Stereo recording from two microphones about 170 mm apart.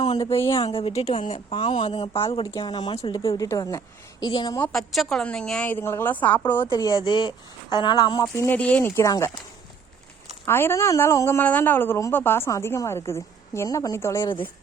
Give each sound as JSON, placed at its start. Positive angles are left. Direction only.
{"t": 0.1, "sound": "speech", "side_deg": 30}
{"t": 0.3, "sound": "a woman's voice", "side_deg": 20}
{"t": 0.7, "sound": "speech", "side_deg": 35}
{"t": 4.6, "sound": "a woman's voice", "side_deg": 0}
{"t": 6.7, "sound": "speech", "side_deg": 20}
{"t": 10.4, "sound": "a woman's voice", "side_deg": 15}